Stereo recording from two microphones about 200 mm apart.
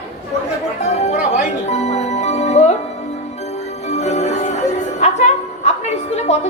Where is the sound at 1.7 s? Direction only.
35° left (ahead or behind).